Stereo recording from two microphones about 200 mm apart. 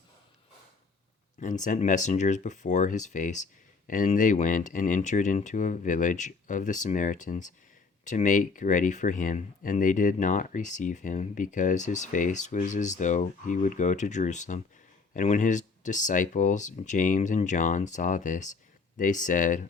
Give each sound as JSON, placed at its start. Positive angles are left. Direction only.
{"t": 1.4, "sound": "speech", "side_deg": 40}